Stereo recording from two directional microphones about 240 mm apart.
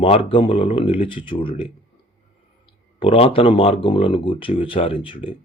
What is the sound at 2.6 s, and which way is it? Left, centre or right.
Speech, left.